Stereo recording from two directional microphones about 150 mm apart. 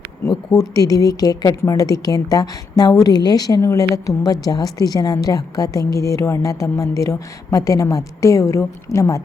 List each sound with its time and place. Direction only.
0.5 s a woman's voice: 25° left (ahead or behind)